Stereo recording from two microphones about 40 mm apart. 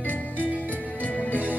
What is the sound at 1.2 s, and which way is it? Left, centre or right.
Music, left.